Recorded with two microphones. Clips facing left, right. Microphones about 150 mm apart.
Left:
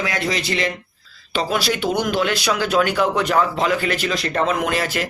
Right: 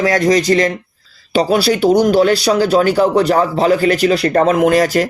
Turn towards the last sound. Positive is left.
turn(degrees=-40)  # may be behind; listen again after turning